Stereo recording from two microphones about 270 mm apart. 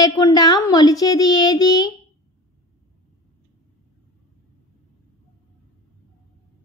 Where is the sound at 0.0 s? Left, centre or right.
Centre.